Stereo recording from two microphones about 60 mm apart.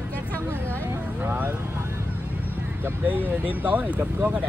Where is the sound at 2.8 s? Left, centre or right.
Right.